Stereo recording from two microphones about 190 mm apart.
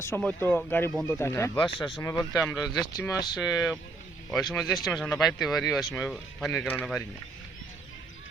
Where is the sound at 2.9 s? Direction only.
15° left (ahead or behind).